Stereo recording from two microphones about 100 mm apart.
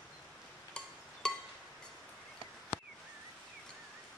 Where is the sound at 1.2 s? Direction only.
5° left (ahead or behind).